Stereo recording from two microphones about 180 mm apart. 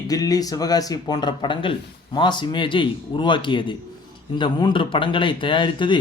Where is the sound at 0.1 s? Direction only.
20° left (ahead or behind).